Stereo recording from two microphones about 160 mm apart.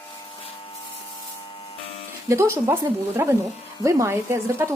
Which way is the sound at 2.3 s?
15° right (ahead or behind).